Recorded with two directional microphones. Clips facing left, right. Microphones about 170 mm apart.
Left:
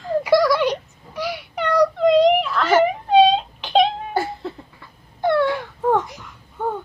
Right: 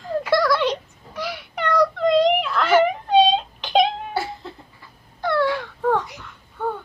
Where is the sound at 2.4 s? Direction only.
Centre (ahead or behind).